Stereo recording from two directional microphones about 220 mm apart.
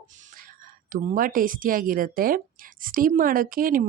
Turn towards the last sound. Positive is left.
turn(degrees=-40)  # may be behind; listen again after turning